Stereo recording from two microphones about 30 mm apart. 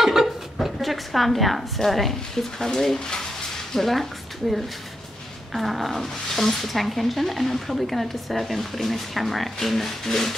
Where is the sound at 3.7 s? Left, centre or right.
Centre.